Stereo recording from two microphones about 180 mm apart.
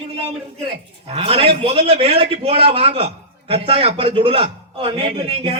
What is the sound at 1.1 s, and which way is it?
A man's voice, 30° right (ahead or behind).